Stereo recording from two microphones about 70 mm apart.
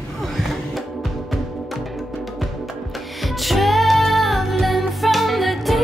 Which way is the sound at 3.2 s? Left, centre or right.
Centre.